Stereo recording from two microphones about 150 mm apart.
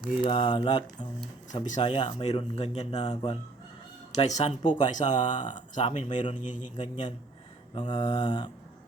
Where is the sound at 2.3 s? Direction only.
45° left (ahead or behind).